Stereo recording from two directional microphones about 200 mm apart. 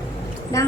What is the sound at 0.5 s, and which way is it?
Speech, 15° left (ahead or behind).